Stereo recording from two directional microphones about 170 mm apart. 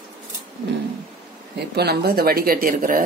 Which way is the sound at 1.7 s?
70° right (ahead or behind).